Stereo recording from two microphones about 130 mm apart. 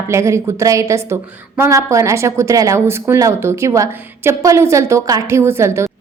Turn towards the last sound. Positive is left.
turn(degrees=-20)  # may be behind; listen again after turning